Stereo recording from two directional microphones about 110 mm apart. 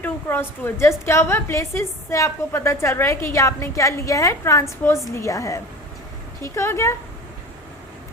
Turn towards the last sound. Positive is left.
turn(degrees=25)  # may be behind; listen again after turning